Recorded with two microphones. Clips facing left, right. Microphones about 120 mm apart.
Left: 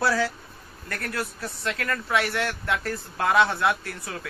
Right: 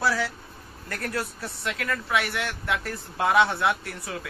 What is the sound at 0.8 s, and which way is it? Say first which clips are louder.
A man's voice: even; 20° right (ahead or behind).